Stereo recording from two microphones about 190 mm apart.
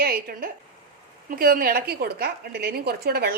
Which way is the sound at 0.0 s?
50° right (ahead or behind).